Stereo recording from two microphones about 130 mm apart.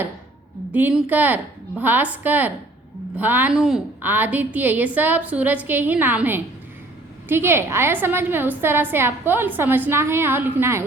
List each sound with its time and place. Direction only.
0.7 s a woman's voice: 10° right (ahead or behind)
3.5 s a woman's voice: centre (ahead or behind)
4.0 s a woman's voice: 15° right (ahead or behind)